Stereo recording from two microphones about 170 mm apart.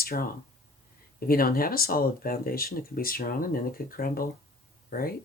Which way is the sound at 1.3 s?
60° left (ahead or behind).